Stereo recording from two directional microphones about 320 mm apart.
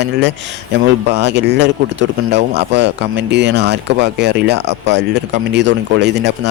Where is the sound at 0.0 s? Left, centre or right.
Right.